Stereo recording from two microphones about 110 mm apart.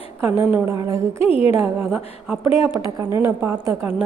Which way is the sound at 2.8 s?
25° right (ahead or behind).